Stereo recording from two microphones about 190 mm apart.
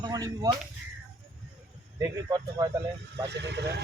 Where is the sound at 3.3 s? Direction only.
65° right (ahead or behind).